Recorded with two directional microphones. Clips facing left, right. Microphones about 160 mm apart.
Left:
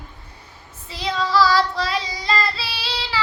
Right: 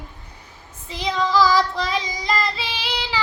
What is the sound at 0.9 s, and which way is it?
Child singing, 15° right (ahead or behind).